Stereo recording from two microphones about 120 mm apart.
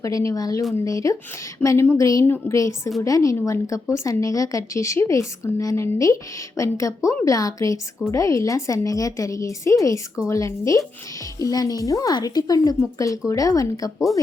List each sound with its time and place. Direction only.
0.0 s a woman's voice: 25° left (ahead or behind)